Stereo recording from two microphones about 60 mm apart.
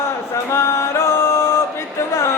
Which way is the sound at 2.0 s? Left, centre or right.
Left.